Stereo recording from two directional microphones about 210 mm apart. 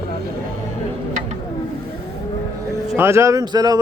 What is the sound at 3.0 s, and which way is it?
Speech, 10° right (ahead or behind).